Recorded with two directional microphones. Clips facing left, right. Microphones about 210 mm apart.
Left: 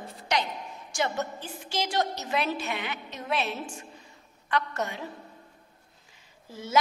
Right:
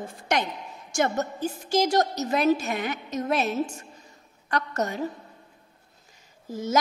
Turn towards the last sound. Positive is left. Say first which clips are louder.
# right 6 dB
turn(degrees=-45)  # may be behind; listen again after turning